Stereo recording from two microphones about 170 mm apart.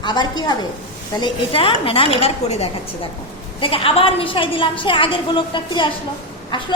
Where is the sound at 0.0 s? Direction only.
25° left (ahead or behind).